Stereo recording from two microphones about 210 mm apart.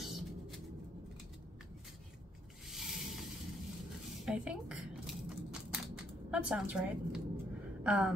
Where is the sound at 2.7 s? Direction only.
Centre (ahead or behind).